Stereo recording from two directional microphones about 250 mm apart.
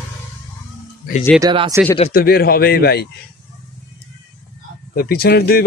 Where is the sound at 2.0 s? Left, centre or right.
Left.